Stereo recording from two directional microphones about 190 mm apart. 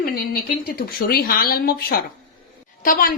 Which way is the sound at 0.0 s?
50° left (ahead or behind).